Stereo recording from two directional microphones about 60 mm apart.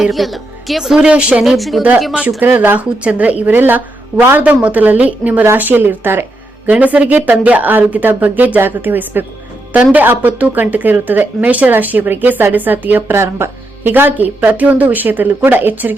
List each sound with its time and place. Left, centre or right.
0.1 s speech: centre; by 1.5 s right
1.5 s speech: centre
2.4 s speech: right
2.7 s speech: right
4.4 s speech: right
6.7 s speech: right
13.1 s speech: right